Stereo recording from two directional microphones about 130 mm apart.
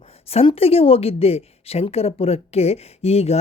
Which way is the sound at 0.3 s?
50° left (ahead or behind).